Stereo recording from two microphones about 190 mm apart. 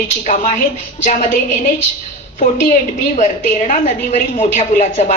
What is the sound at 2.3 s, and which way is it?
A woman's voice, 40° left (ahead or behind).